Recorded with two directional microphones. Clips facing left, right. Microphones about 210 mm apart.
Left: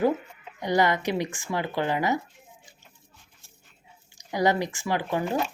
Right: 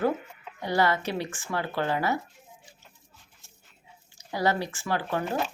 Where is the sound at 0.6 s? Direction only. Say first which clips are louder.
Left 2 dB; 15° left (ahead or behind).